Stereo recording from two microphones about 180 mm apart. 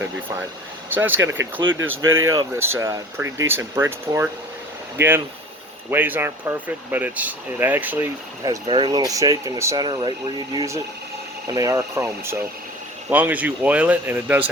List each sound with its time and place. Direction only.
0.0 s speech: 10° right (ahead or behind)
1.1 s speech: 90° right
2.3 s speech: 15° right (ahead or behind)
8.4 s speech: 25° right (ahead or behind); by 14.4 s 10° right (ahead or behind)